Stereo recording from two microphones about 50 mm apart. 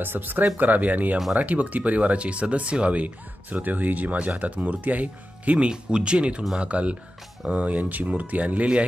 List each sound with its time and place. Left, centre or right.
0.0 s speech: right
5.7 s speech: centre